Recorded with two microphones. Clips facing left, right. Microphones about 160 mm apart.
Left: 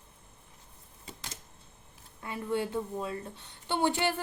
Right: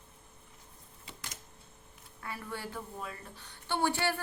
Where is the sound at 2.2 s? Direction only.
20° left (ahead or behind).